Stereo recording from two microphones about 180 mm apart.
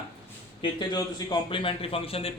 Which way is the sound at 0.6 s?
20° left (ahead or behind).